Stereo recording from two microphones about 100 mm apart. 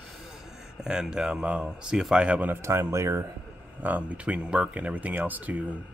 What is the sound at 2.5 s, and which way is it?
Speech, 30° right (ahead or behind).